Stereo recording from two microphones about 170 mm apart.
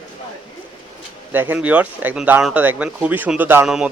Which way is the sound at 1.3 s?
10° right (ahead or behind).